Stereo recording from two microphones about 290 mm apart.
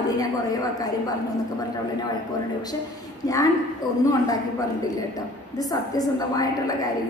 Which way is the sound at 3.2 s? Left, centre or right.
Centre.